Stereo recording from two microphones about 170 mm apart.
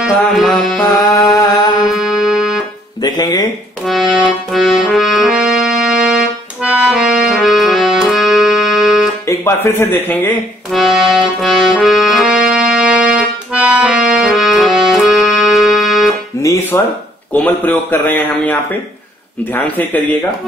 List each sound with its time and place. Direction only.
0.0 s music: centre (ahead or behind)
1.1 s music: 20° left (ahead or behind)
1.9 s music: centre (ahead or behind)
3.0 s music: 25° left (ahead or behind)
3.8 s accordion: centre (ahead or behind)
9.3 s a man's voice: 15° left (ahead or behind)
10.7 s music: centre (ahead or behind)
16.4 s music: 20° left (ahead or behind)
17.3 s a man's voice: 10° left (ahead or behind)